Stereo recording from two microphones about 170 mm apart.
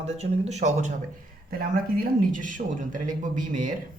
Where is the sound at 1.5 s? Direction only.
60° right (ahead or behind).